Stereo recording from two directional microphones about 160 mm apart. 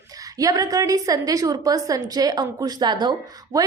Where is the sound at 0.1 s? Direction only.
20° right (ahead or behind).